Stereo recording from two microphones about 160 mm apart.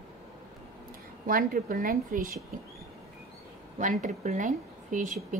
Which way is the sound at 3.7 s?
50° right (ahead or behind).